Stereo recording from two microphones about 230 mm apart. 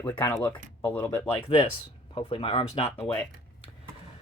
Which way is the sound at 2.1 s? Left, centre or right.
Left.